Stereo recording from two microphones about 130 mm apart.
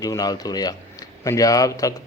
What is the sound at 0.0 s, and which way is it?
Speech, 30° left (ahead or behind).